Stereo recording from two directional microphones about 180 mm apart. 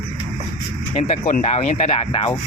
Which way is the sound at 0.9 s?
35° left (ahead or behind).